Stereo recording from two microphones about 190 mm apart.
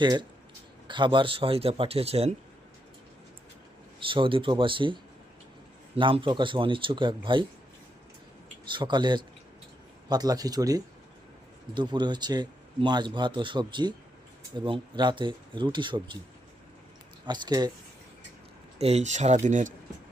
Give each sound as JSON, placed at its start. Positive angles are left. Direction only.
{"t": 0.0, "sound": "speech", "side_deg": -25}
{"t": 4.0, "sound": "speech", "side_deg": -25}
{"t": 6.0, "sound": "speech", "side_deg": -25}
{"t": 8.7, "sound": "speech", "side_deg": -25}
{"t": 17.2, "sound": "speech", "side_deg": -25}
{"t": 18.8, "sound": "speech", "side_deg": -35}